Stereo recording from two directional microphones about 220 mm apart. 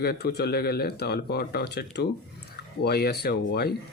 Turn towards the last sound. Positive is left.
turn(degrees=45)  # may be behind; listen again after turning